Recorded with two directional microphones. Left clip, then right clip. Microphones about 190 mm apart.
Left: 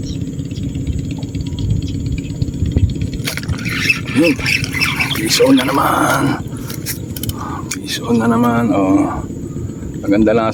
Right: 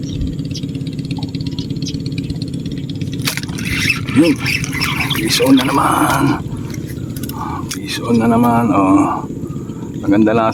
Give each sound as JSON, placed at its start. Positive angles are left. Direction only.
{"t": 4.1, "sound": "speech", "side_deg": 15}
{"t": 5.3, "sound": "speech", "side_deg": 0}
{"t": 8.0, "sound": "speech", "side_deg": 0}